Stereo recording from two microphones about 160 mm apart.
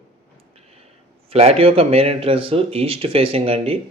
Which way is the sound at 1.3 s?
40° right (ahead or behind).